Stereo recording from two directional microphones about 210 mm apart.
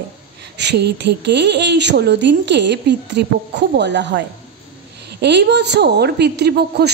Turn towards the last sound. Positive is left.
turn(degrees=-50)  # may be behind; listen again after turning